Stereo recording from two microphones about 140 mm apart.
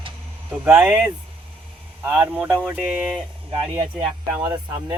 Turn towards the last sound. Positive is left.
turn(degrees=-25)  # may be behind; listen again after turning